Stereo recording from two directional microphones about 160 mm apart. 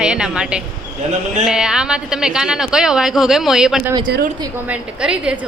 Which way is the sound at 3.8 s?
20° right (ahead or behind).